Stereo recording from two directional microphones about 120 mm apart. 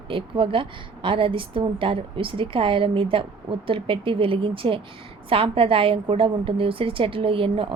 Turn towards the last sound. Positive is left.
turn(degrees=-50)  # may be behind; listen again after turning